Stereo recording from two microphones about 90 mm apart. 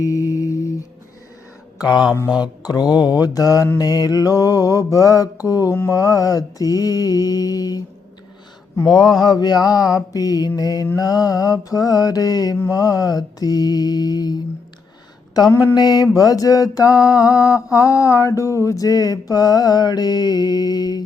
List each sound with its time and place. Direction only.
0.0 s mantra: 40° left (ahead or behind)
1.8 s mantra: 50° left (ahead or behind)
9.1 s mantra: 50° left (ahead or behind)
15.4 s mantra: 40° left (ahead or behind)